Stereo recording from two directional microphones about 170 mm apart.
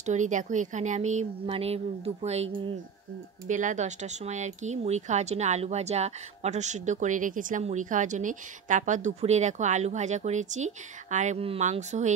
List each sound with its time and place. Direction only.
0.0 s speech: 45° right (ahead or behind)